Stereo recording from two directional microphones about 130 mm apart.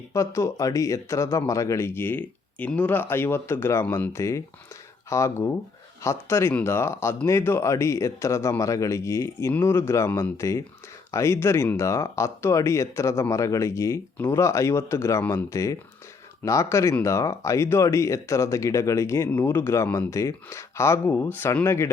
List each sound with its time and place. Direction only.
0.1 s speech: 20° left (ahead or behind)